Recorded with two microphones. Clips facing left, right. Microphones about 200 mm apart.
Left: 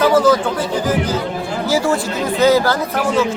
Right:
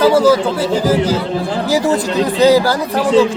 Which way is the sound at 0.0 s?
10° right (ahead or behind).